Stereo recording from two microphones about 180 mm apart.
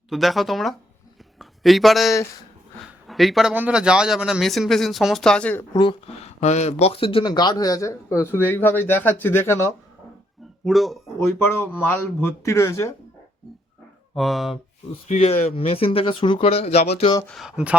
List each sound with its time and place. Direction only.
0.1 s a man's voice: centre (ahead or behind)
5.7 s speech: 25° left (ahead or behind)
6.4 s speech: 40° left (ahead or behind); by 9.6 s 15° left (ahead or behind)
10.7 s a man's voice: centre (ahead or behind)
11.4 s speech: 10° left (ahead or behind)
14.2 s a man's voice: centre (ahead or behind)
15.0 s speech: 35° left (ahead or behind)
17.2 s a man's voice: centre (ahead or behind)